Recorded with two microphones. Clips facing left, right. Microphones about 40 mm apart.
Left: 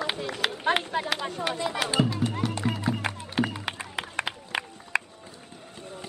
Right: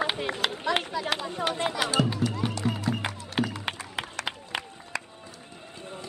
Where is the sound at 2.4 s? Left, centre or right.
Right.